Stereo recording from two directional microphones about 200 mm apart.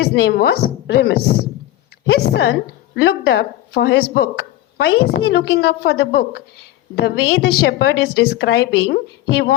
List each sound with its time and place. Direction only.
0.0 s a woman's voice: 55° left (ahead or behind)